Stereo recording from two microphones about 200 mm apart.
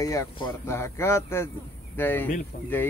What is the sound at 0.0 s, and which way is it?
Speech, 20° left (ahead or behind).